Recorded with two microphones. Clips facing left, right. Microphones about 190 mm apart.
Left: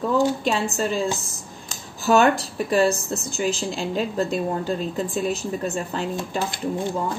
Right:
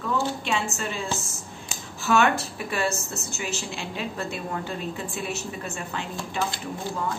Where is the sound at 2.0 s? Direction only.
35° left (ahead or behind).